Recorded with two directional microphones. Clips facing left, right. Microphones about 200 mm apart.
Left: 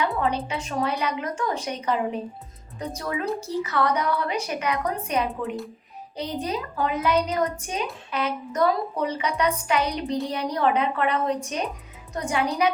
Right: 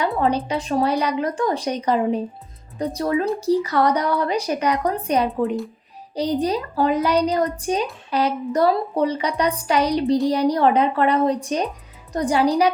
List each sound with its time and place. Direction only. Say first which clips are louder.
0.0 s speech: right 4 dB; 35° right (ahead or behind)